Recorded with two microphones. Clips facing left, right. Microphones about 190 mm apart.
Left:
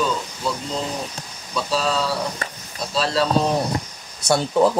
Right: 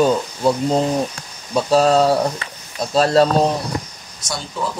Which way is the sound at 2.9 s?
50° right (ahead or behind).